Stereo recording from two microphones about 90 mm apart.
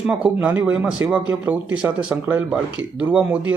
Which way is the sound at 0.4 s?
15° right (ahead or behind).